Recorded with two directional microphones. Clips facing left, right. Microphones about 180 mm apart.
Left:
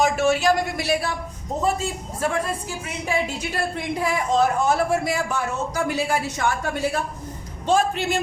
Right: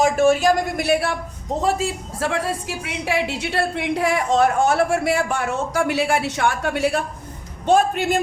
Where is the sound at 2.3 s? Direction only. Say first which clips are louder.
Right 2 dB; 75° right (ahead or behind).